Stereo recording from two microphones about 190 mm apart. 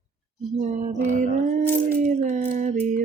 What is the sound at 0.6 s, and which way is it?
Music, 40° right (ahead or behind).